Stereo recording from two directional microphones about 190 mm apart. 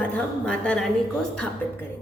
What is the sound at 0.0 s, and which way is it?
Speech, 5° left (ahead or behind).